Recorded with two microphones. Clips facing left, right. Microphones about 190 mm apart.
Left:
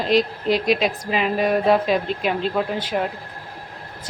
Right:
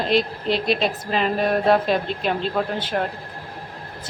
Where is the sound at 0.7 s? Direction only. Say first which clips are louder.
Left 1 dB; 5° left (ahead or behind).